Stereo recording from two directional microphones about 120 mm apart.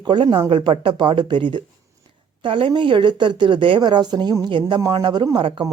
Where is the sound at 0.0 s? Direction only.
40° right (ahead or behind).